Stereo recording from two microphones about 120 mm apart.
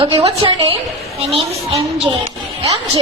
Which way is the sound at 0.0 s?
50° right (ahead or behind).